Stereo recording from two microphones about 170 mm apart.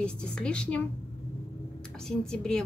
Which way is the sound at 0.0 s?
5° left (ahead or behind).